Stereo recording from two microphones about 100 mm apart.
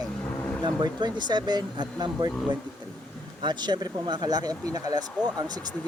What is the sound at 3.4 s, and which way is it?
Speech, 45° right (ahead or behind).